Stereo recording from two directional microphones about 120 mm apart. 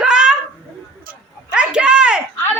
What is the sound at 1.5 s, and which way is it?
Speech, 10° right (ahead or behind).